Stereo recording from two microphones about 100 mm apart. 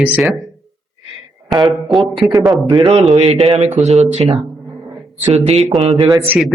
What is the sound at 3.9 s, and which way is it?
Speech, 90° right.